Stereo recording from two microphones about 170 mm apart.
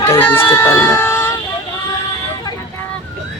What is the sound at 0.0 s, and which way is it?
Speech, 15° left (ahead or behind).